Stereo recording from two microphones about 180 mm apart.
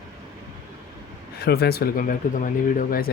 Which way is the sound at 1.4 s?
65° left (ahead or behind).